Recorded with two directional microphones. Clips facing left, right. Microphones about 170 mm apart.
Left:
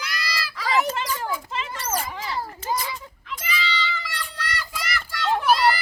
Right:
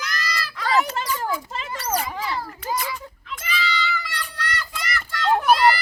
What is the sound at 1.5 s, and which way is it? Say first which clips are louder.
Speech: left 2 dB; 45° right (ahead or behind).